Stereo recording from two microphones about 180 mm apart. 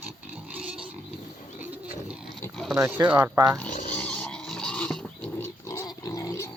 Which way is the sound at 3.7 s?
45° left (ahead or behind).